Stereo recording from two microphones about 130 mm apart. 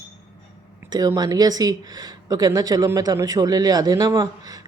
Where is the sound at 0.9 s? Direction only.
30° right (ahead or behind).